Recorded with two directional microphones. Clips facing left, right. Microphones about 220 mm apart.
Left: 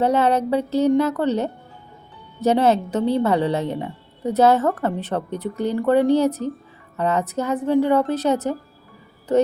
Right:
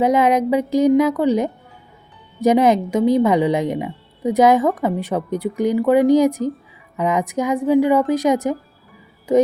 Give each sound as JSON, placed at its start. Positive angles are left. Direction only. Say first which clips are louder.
{"t": 0.0, "sound": "a woman's voice", "louder": "right 3 dB", "side_deg": -10}